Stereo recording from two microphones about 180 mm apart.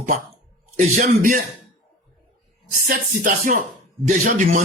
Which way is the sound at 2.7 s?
45° right (ahead or behind).